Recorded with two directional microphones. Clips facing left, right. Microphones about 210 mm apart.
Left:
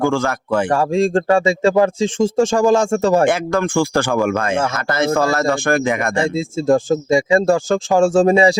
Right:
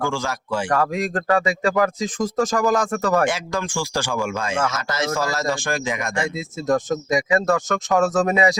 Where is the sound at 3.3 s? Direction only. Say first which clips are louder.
Left 8 dB; 55° left (ahead or behind).